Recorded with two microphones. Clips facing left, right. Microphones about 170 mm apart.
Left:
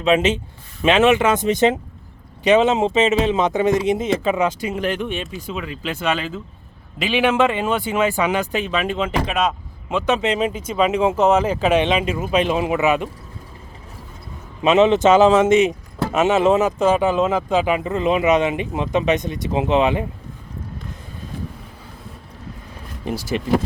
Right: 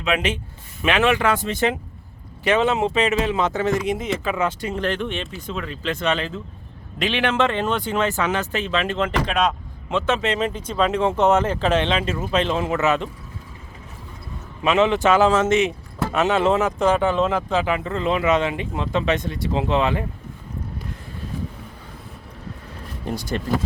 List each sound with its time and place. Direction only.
0.0 s a man's voice: 25° left (ahead or behind); by 10.0 s 5° left (ahead or behind)
10.1 s a man's voice: 15° left (ahead or behind)
14.6 s a man's voice: 20° left (ahead or behind)
23.0 s speech: 5° left (ahead or behind)